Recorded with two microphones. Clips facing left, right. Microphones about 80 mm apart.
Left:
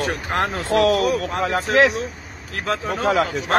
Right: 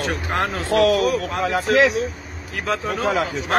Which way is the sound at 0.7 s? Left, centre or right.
Left.